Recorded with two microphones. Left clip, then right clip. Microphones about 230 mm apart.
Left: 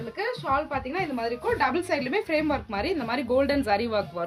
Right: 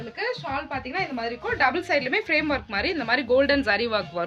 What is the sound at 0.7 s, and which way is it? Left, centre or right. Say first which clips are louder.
A woman's voice: even; centre.